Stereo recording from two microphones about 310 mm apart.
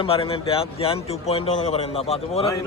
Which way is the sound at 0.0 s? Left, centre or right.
Centre.